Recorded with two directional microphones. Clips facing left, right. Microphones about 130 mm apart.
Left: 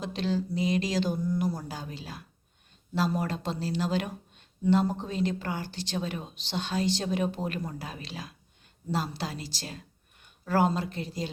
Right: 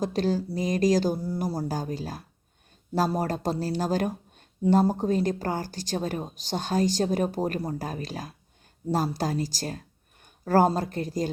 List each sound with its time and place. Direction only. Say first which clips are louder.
0.0 s speech: right 4 dB; 40° right (ahead or behind)